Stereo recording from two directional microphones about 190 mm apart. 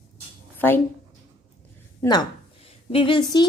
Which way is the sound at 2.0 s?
20° left (ahead or behind).